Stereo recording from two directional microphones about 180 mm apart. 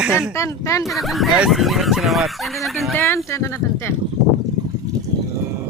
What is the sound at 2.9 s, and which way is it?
Speech, 15° left (ahead or behind).